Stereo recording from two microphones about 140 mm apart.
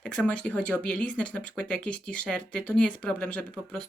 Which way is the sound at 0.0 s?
10° left (ahead or behind).